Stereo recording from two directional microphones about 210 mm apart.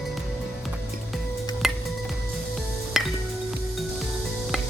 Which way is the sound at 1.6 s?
Centre (ahead or behind).